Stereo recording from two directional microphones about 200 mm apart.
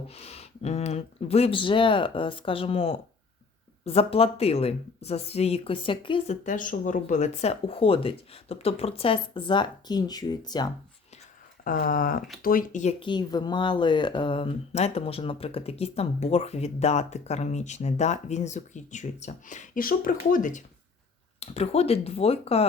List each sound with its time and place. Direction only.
0.1 s speech: 30° left (ahead or behind)
6.4 s speech: 40° left (ahead or behind); by 10.7 s 20° left (ahead or behind)
11.6 s speech: 45° left (ahead or behind)